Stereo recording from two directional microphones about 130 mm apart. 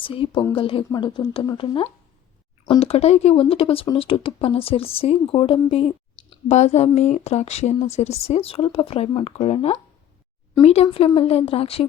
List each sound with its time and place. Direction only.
0.0 s speech: 40° left (ahead or behind)
6.5 s a woman's voice: 60° left (ahead or behind)